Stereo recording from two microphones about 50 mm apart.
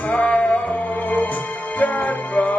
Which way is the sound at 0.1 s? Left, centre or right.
Left.